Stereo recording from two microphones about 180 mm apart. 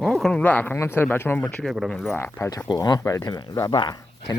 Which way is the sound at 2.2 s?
15° left (ahead or behind).